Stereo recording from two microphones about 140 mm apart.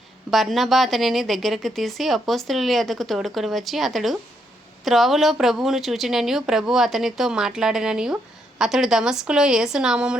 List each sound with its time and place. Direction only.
0.3 s speech: centre (ahead or behind)